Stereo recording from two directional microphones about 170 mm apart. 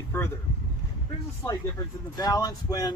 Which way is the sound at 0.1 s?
10° left (ahead or behind).